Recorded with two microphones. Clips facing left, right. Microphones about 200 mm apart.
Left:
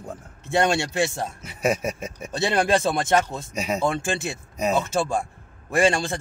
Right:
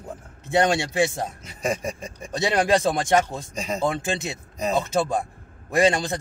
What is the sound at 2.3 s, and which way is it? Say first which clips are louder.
A man's voice: right 1 dB; 15° right (ahead or behind).